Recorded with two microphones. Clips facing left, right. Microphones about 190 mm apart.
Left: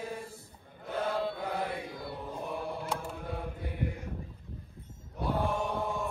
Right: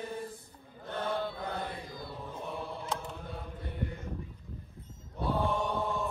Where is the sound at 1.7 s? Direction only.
65° left (ahead or behind).